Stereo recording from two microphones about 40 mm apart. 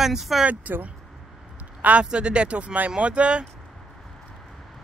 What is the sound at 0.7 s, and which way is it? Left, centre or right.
Speech, right.